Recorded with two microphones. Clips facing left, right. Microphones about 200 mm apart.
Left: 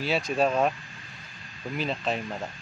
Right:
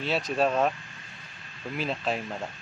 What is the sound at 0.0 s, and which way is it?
Speech, centre (ahead or behind).